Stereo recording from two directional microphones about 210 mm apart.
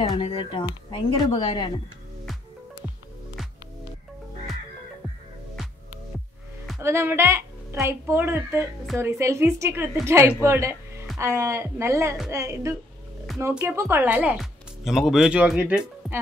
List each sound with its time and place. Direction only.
0.1 s speech: 25° left (ahead or behind)
6.8 s a woman's voice: 10° right (ahead or behind)